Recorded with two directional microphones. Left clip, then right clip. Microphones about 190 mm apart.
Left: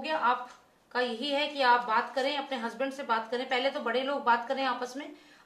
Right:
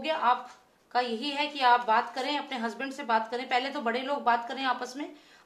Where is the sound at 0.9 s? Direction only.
45° right (ahead or behind).